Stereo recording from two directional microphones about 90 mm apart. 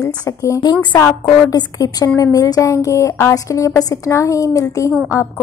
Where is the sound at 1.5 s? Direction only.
45° left (ahead or behind).